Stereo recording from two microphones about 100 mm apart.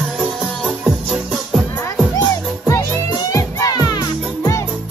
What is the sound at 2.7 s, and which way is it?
Music, 30° left (ahead or behind).